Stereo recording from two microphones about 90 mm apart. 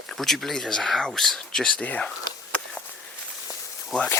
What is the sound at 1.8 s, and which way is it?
Speech, 15° left (ahead or behind).